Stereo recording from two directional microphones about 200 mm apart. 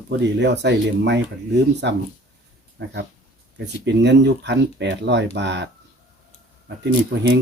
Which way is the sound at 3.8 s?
60° right (ahead or behind).